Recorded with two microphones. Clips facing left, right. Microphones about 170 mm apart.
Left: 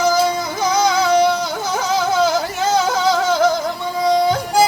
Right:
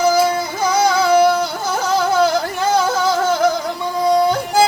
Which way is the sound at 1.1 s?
55° right (ahead or behind).